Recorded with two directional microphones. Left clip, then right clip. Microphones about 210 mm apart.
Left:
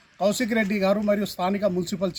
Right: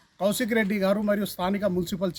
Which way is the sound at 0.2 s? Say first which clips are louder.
Left 2 dB; 5° right (ahead or behind).